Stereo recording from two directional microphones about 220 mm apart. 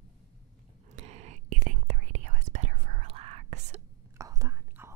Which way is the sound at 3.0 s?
25° right (ahead or behind).